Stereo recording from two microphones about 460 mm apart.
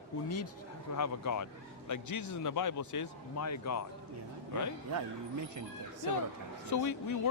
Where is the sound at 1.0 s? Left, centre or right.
Left.